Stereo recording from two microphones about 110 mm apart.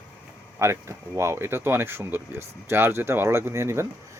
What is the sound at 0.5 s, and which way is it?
Speech, 25° right (ahead or behind).